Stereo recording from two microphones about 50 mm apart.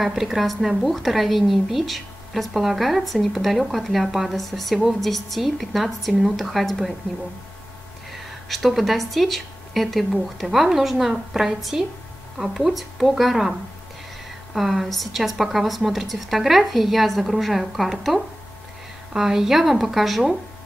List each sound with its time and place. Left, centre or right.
0.0 s speech: centre
8.5 s speech: centre